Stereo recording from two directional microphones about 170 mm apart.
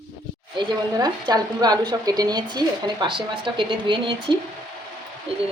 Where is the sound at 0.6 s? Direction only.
25° right (ahead or behind).